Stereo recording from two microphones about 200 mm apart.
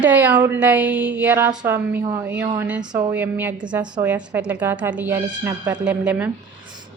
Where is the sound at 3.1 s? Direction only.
10° right (ahead or behind).